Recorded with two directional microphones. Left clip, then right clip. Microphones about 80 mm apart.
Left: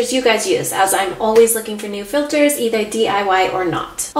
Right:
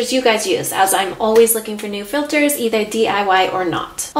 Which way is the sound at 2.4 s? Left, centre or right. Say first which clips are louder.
Left 1 dB; right.